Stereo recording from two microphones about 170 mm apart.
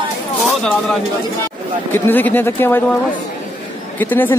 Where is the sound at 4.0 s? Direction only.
10° left (ahead or behind).